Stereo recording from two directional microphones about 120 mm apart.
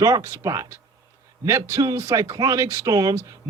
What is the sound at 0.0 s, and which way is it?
Speech, 25° right (ahead or behind).